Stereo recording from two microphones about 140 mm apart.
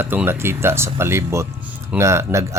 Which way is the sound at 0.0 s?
15° right (ahead or behind).